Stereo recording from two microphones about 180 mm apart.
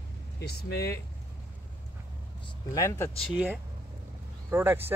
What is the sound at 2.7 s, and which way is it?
Speech, 15° left (ahead or behind).